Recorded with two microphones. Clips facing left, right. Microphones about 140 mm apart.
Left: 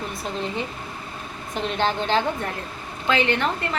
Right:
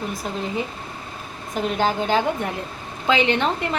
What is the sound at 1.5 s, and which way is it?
A woman's voice, 5° right (ahead or behind).